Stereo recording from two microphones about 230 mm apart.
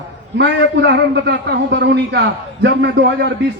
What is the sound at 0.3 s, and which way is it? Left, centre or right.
Speech, right.